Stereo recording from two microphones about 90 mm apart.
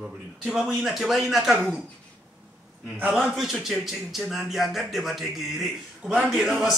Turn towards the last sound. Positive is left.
turn(degrees=-5)  # may be behind; listen again after turning